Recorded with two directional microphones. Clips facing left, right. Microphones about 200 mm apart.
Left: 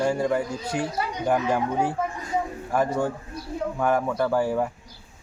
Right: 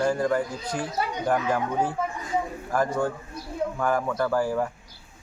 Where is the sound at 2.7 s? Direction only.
5° left (ahead or behind).